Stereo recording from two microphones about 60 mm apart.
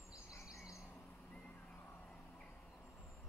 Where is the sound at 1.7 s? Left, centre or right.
Left.